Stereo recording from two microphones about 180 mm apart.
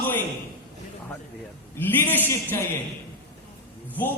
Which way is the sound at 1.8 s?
10° left (ahead or behind).